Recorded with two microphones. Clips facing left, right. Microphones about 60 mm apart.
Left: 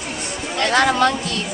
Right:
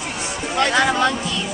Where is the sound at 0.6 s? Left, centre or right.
Centre.